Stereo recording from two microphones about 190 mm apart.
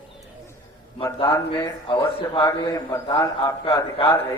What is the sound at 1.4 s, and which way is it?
A man's voice, 25° left (ahead or behind).